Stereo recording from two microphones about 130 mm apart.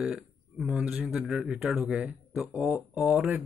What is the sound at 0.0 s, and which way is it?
A man's voice, 10° right (ahead or behind).